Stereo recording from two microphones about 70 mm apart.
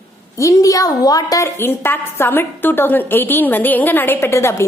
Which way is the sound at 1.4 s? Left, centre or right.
Left.